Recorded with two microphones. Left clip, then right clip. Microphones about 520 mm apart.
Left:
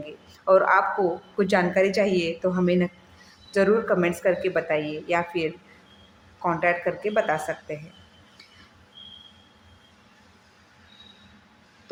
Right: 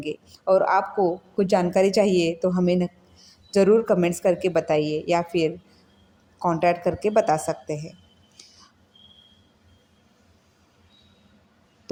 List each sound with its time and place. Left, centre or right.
0.4 s speech: right